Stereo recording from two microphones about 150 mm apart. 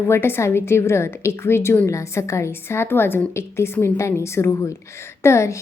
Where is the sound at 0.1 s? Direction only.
15° left (ahead or behind).